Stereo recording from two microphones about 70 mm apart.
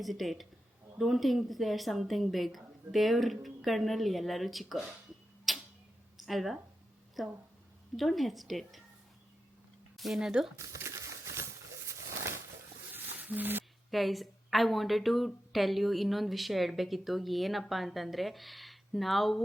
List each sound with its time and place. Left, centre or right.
0.0 s a woman's voice: centre
5.5 s tick-tock: centre
6.1 s a woman's voice: centre
10.0 s a woman's voice: centre
10.6 s a sound: right
11.9 s bird: right
13.1 s a sound: right
13.9 s a woman's voice: centre